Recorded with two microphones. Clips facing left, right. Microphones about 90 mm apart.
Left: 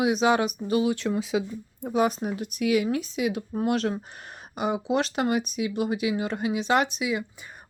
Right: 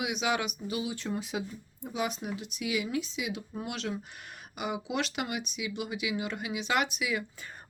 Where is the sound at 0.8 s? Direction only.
90° left.